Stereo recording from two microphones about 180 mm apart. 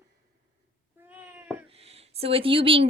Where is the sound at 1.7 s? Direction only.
35° right (ahead or behind).